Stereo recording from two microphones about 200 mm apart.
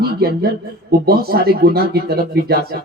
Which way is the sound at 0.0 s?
50° right (ahead or behind).